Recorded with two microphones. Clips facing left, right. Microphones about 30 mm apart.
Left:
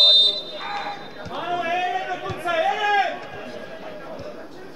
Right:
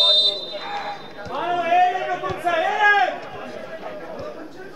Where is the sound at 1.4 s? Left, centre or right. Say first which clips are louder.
Right 6 dB; right.